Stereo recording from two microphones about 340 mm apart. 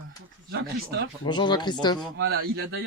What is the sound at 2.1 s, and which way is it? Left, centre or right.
Speech, right.